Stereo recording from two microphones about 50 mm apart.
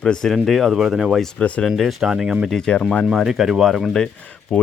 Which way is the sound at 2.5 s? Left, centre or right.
Centre.